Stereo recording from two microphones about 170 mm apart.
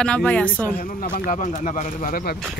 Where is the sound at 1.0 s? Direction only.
45° left (ahead or behind).